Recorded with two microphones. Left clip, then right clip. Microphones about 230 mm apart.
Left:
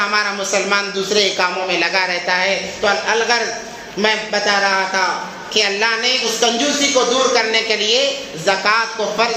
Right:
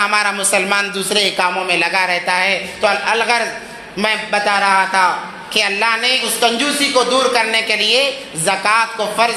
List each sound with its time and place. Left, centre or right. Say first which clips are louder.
0.0 s speech: right 2 dB; right